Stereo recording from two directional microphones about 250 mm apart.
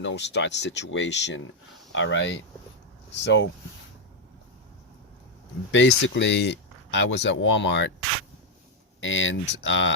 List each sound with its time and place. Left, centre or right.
0.0 s speech: left
5.7 s speech: left
9.0 s speech: left